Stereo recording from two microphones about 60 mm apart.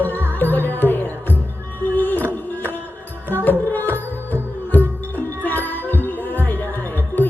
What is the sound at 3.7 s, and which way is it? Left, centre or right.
Music, left.